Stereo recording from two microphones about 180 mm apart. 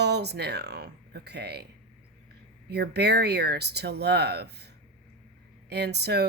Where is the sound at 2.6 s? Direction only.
65° right (ahead or behind).